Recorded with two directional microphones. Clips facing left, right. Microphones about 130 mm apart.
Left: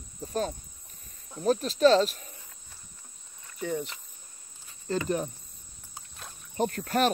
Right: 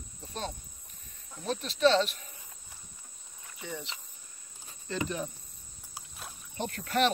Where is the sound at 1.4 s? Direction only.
40° left (ahead or behind).